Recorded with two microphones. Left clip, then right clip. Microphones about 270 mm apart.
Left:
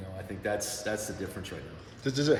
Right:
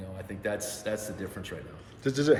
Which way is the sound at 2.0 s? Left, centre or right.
Right.